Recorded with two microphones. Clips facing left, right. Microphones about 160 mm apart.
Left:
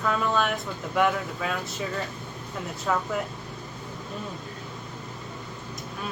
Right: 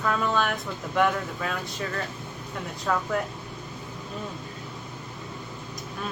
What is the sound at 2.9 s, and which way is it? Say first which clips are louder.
Speech: even; 5° left (ahead or behind).